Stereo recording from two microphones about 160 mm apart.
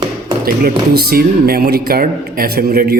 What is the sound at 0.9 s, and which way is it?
Speech, 75° right (ahead or behind).